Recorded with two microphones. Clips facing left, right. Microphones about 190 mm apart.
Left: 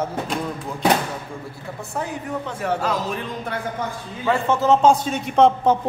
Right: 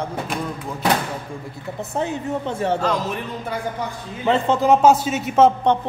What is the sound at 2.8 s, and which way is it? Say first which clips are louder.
Speech: right 2 dB; 5° left (ahead or behind).